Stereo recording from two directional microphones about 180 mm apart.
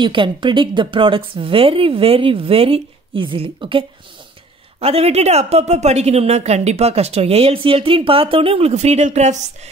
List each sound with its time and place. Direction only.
0.0 s a woman's voice: 25° right (ahead or behind)